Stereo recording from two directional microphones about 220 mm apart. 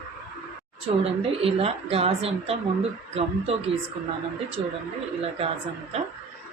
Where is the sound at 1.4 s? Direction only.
25° right (ahead or behind).